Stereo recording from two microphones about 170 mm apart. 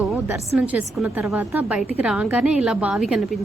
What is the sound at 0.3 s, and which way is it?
A woman's voice, 10° right (ahead or behind).